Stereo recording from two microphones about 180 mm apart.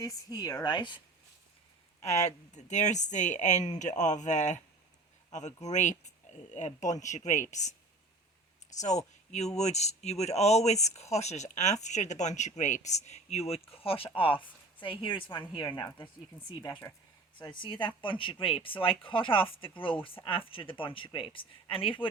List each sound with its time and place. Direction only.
0.0 s speech: 20° left (ahead or behind)
2.0 s speech: 40° left (ahead or behind)
8.7 s speech: 40° left (ahead or behind)